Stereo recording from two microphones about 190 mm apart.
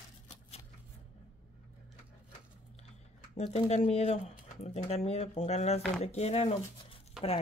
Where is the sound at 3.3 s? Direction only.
35° left (ahead or behind).